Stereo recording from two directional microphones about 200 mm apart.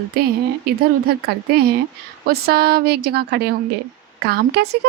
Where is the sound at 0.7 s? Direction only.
50° right (ahead or behind).